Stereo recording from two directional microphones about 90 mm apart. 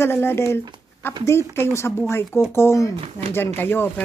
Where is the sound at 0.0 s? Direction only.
25° left (ahead or behind).